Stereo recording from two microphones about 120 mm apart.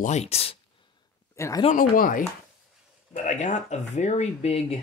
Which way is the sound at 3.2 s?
75° left (ahead or behind).